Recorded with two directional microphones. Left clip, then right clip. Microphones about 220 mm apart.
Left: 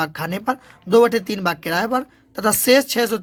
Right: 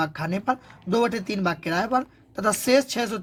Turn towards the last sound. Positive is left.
turn(degrees=35)  # may be behind; listen again after turning